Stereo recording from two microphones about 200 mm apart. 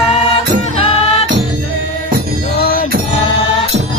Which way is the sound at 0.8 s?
30° left (ahead or behind).